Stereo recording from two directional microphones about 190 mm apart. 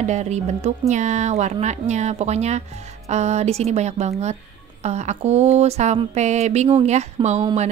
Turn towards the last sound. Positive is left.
turn(degrees=-35)  # may be behind; listen again after turning